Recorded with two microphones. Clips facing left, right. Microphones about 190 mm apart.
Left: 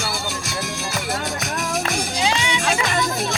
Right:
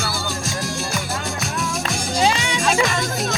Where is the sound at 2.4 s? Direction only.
45° right (ahead or behind).